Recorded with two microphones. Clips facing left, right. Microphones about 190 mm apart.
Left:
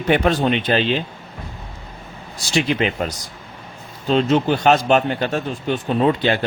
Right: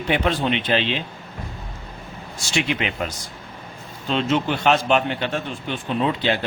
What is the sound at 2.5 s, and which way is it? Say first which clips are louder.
A man's voice: left 5 dB; 35° left (ahead or behind).